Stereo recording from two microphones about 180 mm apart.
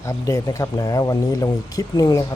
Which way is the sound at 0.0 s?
20° left (ahead or behind).